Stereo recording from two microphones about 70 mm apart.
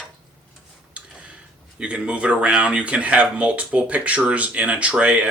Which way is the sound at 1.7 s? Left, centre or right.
Centre.